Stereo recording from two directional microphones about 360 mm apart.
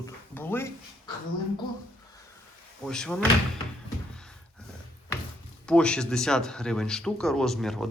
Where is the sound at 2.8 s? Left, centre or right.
Centre.